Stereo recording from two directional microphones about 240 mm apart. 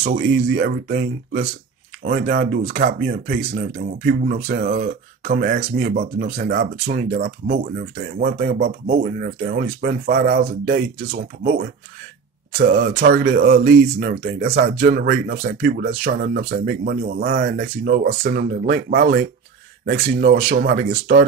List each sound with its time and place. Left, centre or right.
0.0 s speech: right